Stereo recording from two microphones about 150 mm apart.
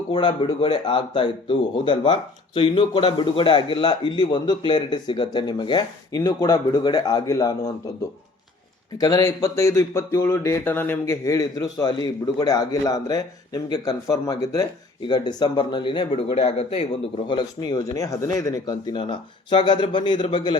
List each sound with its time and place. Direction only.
0.1 s speech: 30° left (ahead or behind)
9.0 s speech: 25° left (ahead or behind)